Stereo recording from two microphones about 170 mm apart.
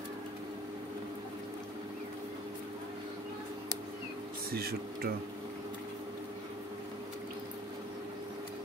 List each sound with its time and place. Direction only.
4.5 s speech: 65° right (ahead or behind)